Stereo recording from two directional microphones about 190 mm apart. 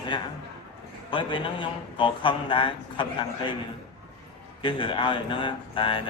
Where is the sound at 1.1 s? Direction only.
25° left (ahead or behind).